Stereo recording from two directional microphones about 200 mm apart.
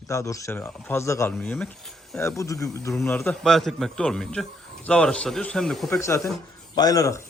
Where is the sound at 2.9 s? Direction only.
5° left (ahead or behind).